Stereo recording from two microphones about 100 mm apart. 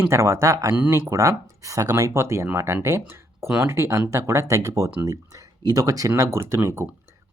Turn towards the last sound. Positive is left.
turn(degrees=-25)  # may be behind; listen again after turning